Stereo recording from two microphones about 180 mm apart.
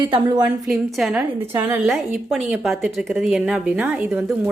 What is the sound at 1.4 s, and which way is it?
Speech, 25° right (ahead or behind).